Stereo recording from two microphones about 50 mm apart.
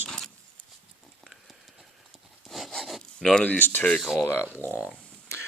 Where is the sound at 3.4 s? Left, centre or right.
Left.